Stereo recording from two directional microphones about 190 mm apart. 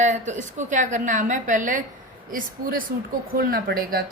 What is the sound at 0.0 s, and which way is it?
A woman's voice, 40° right (ahead or behind).